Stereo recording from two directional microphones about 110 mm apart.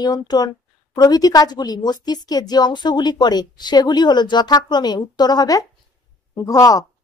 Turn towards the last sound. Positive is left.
turn(degrees=30)  # may be behind; listen again after turning